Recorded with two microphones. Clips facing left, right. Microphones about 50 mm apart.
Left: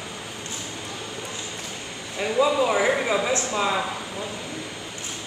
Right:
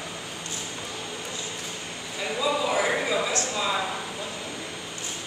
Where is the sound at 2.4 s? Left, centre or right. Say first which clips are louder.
Left 5 dB; centre.